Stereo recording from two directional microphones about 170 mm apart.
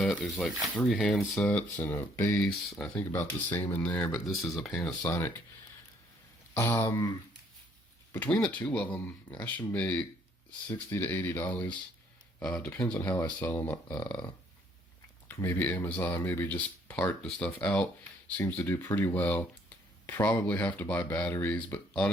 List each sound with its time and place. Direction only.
0.0 s speech: 5° left (ahead or behind)
6.5 s speech: 15° left (ahead or behind)
15.4 s speech: 10° left (ahead or behind)